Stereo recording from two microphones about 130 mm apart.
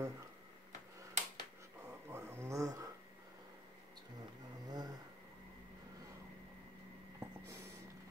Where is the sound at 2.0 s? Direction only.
20° right (ahead or behind).